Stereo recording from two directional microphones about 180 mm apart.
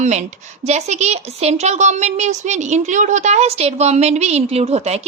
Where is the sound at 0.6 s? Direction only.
35° right (ahead or behind).